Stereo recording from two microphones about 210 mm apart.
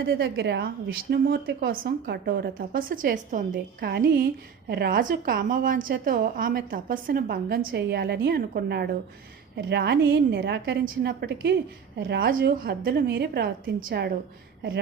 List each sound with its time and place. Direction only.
0.1 s a woman's voice: 50° right (ahead or behind)